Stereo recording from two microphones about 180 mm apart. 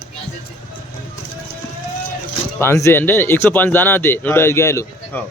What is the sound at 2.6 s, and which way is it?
Speech, 15° left (ahead or behind).